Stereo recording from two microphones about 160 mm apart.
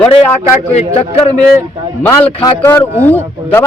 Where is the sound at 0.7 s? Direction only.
40° left (ahead or behind).